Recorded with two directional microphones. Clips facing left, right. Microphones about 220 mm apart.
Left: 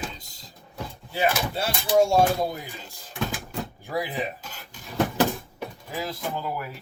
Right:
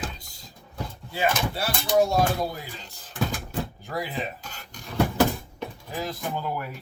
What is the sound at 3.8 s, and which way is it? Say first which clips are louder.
Speech: left 6 dB; 15° left (ahead or behind).